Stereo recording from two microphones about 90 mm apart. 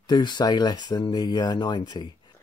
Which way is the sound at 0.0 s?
55° left (ahead or behind).